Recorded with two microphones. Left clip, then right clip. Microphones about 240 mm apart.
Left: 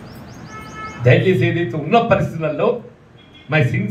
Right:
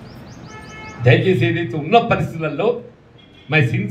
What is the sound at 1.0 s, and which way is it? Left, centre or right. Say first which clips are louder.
A man's voice: left 1 dB; right.